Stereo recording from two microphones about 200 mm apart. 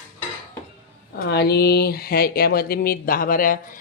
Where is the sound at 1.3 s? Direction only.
55° left (ahead or behind).